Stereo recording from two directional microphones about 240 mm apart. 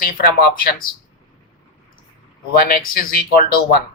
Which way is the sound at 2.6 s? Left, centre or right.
Left.